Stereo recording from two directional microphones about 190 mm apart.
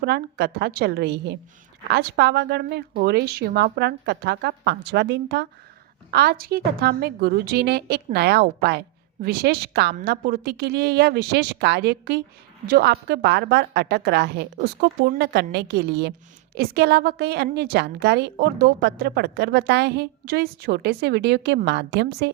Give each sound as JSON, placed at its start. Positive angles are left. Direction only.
{"t": 0.0, "sound": "a woman's voice", "side_deg": -55}